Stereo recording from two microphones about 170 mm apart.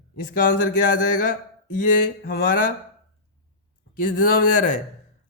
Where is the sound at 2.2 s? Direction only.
65° left (ahead or behind).